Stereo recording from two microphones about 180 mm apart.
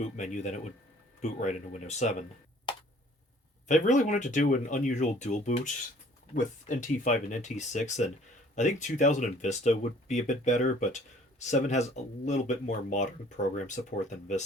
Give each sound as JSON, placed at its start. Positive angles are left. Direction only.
{"t": 0.2, "sound": "speech", "side_deg": 40}
{"t": 2.7, "sound": "tick", "side_deg": 25}
{"t": 3.7, "sound": "speech", "side_deg": 45}